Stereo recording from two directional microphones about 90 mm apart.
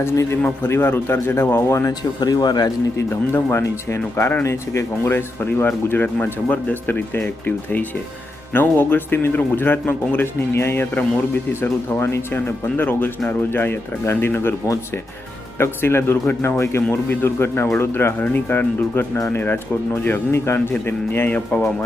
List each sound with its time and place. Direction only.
0.0 s speech: 30° left (ahead or behind)
1.9 s speech: 50° left (ahead or behind)
3.1 s speech: 30° left (ahead or behind)
15.5 s speech: 30° left (ahead or behind)